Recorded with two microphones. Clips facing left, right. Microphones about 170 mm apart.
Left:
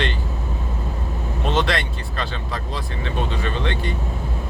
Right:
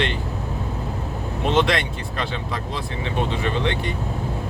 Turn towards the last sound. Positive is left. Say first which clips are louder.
# right 2 dB
turn(degrees=-20)  # may be behind; listen again after turning